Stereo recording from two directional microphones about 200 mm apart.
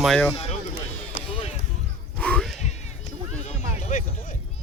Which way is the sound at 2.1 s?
5° left (ahead or behind).